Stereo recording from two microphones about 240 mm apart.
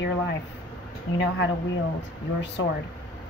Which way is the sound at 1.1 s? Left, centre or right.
Left.